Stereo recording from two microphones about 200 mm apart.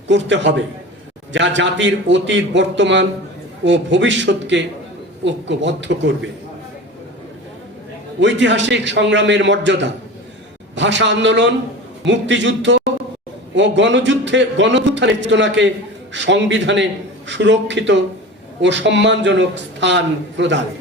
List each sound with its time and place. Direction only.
0.1 s a man's voice: 65° right (ahead or behind)
8.2 s a man's voice: 65° right (ahead or behind)